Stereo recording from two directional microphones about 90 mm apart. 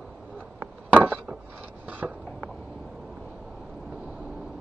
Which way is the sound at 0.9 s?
20° right (ahead or behind).